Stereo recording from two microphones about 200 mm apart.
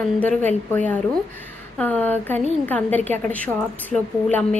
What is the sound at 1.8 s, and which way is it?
A woman's voice, 10° left (ahead or behind).